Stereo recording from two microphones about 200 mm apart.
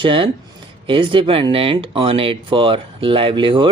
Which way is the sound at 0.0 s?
25° right (ahead or behind).